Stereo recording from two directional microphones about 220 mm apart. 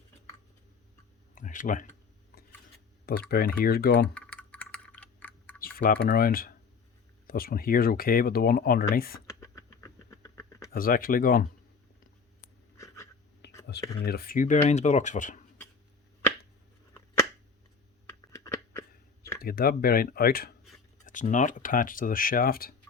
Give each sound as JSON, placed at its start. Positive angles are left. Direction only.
{"t": 1.4, "sound": "speech", "side_deg": 35}
{"t": 3.1, "sound": "speech", "side_deg": 45}
{"t": 4.1, "sound": "typing", "side_deg": 5}
{"t": 5.7, "sound": "speech", "side_deg": 40}
{"t": 9.4, "sound": "a sound", "side_deg": 15}
{"t": 10.7, "sound": "speech", "side_deg": 40}
{"t": 12.7, "sound": "a sound", "side_deg": 10}
{"t": 13.4, "sound": "whispering", "side_deg": 50}
{"t": 14.0, "sound": "speech", "side_deg": 45}
{"t": 18.0, "sound": "a sound", "side_deg": 15}
{"t": 19.4, "sound": "speech", "side_deg": 45}